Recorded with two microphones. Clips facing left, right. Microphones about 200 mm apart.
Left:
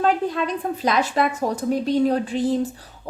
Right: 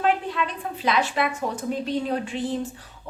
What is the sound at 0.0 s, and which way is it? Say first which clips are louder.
A woman's voice: left 3 dB; 40° left (ahead or behind).